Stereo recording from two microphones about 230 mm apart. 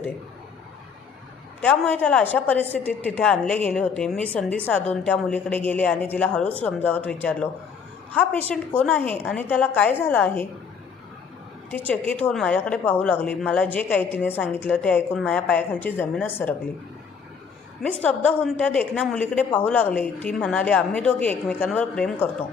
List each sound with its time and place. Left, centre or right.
1.6 s a woman's voice: centre
11.7 s a woman's voice: centre
18.0 s a woman's voice: centre